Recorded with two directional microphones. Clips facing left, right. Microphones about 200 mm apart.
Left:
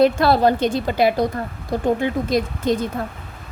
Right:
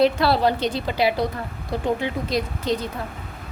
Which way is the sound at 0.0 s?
45° left (ahead or behind).